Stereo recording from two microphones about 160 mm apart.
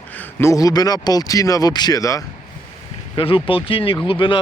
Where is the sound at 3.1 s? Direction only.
35° left (ahead or behind).